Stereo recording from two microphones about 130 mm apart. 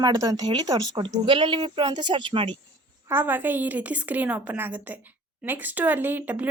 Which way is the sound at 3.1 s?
15° right (ahead or behind).